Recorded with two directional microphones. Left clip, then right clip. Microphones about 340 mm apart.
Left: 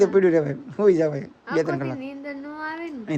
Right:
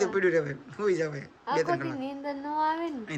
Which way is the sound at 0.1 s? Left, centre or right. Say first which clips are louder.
Left 7 dB; centre.